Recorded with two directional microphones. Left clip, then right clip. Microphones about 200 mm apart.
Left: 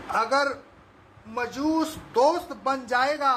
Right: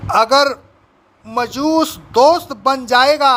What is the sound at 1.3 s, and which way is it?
Speech, 50° right (ahead or behind).